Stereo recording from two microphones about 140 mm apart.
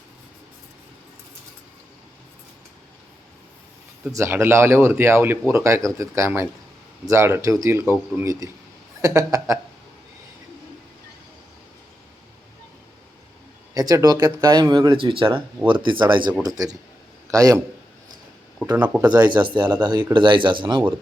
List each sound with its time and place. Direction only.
4.1 s speech: 20° right (ahead or behind)
13.7 s speech: 25° right (ahead or behind)
18.6 s speech: 10° right (ahead or behind)
19.1 s speech: 30° right (ahead or behind)